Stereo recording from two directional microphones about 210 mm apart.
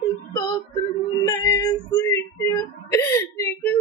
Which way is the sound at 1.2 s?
10° left (ahead or behind).